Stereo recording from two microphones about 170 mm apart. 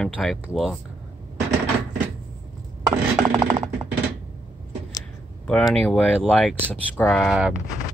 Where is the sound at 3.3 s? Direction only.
20° right (ahead or behind).